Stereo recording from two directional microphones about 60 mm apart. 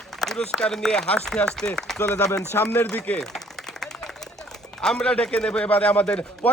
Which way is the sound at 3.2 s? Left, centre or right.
Centre.